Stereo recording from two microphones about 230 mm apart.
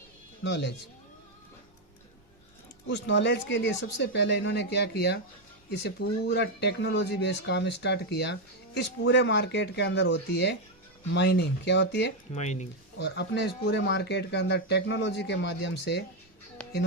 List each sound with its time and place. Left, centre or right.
0.4 s speech: left
2.8 s speech: left
12.3 s speech: left
13.0 s speech: left